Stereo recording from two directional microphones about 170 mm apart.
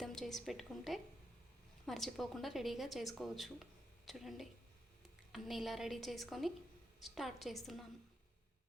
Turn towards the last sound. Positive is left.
turn(degrees=0)  # may be behind; listen again after turning